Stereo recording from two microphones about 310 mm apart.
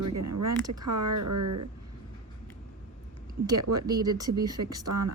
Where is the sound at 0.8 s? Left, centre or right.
Right.